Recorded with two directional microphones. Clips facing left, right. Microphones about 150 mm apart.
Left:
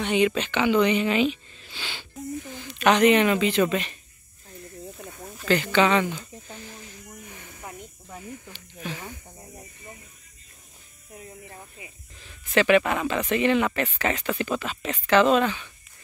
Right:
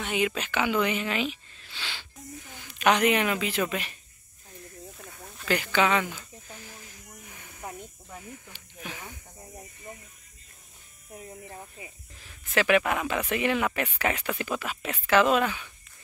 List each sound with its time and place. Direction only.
0.0 s speech: 5° right (ahead or behind)
2.5 s speech: 10° right (ahead or behind)
4.9 s snake: 5° left (ahead or behind)
5.4 s speech: 10° right (ahead or behind)
6.4 s snake: 5° right (ahead or behind)
8.1 s speech: 5° left (ahead or behind)
8.5 s speech: 10° right (ahead or behind)
11.1 s electric shaver: 30° right (ahead or behind)
12.2 s speech: 5° right (ahead or behind)